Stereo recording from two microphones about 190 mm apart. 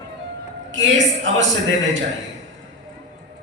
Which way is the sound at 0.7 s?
80° right.